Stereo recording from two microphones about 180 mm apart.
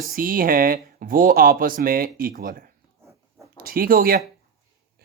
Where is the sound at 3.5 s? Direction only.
55° right (ahead or behind).